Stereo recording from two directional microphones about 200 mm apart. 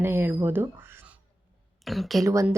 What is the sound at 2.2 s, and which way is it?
Speech, 15° right (ahead or behind).